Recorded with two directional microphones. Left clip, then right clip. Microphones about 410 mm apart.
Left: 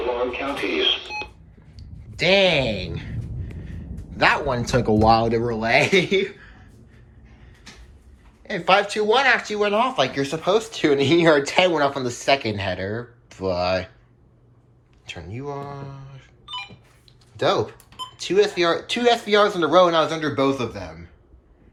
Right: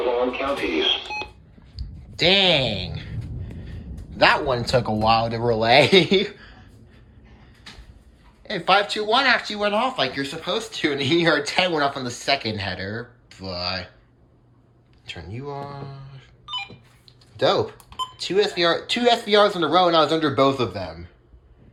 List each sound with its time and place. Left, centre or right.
0.7 s speech: centre
4.2 s speech: centre
8.4 s speech: centre
15.0 s telephone dialing: centre
17.3 s speech: centre